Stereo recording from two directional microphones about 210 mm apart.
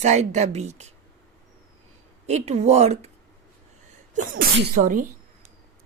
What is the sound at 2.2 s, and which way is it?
Speech, 30° right (ahead or behind).